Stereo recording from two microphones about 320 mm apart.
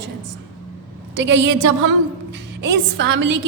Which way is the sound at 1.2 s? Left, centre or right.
Right.